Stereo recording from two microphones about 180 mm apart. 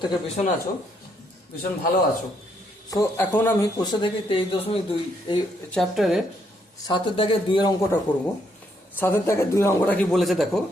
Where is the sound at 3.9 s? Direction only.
30° left (ahead or behind).